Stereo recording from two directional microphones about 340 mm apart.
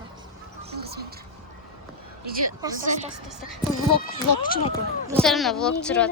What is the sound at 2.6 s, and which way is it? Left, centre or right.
Speech, centre.